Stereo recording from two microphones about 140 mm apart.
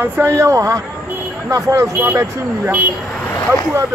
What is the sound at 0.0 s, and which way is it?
Speech, 20° right (ahead or behind).